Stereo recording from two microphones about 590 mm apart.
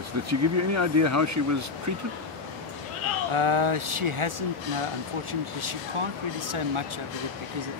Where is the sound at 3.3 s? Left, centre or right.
Right.